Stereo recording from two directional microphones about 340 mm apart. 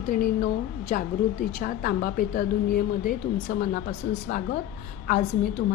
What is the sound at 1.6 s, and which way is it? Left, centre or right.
A woman's voice, left.